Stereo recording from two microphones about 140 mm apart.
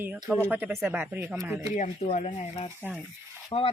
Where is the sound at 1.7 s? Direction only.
65° left (ahead or behind).